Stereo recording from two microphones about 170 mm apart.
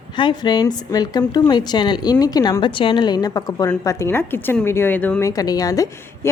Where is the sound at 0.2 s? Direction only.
25° left (ahead or behind); by 5.3 s 10° left (ahead or behind).